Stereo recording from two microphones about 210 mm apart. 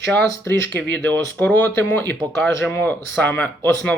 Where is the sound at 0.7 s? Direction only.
55° right (ahead or behind).